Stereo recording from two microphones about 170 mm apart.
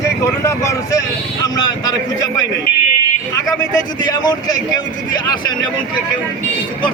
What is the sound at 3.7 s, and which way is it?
Speech, 25° left (ahead or behind).